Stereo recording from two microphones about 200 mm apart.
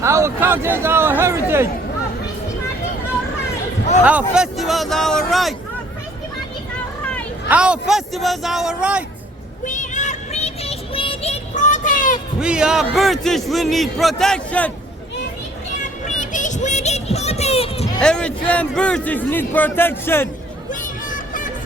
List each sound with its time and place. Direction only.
0.0 s speech: 15° right (ahead or behind)
4.0 s speech: 5° right (ahead or behind)
7.4 s speech: 5° right (ahead or behind)
9.6 s child singing: 40° left (ahead or behind)
12.4 s speech: 5° right (ahead or behind)
16.0 s music: 40° left (ahead or behind)
18.0 s a man's voice: 5° left (ahead or behind)
20.7 s a sound: 40° left (ahead or behind)